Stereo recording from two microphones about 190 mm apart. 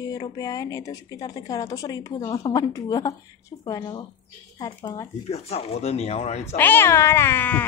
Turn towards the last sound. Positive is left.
turn(degrees=10)  # may be behind; listen again after turning